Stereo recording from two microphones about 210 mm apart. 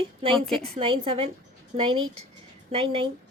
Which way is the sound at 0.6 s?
25° right (ahead or behind).